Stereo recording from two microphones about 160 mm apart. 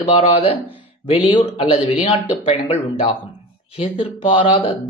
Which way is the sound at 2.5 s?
35° left (ahead or behind).